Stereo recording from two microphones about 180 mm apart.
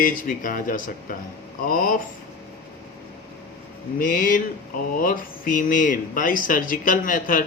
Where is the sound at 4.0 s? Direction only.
55° left (ahead or behind).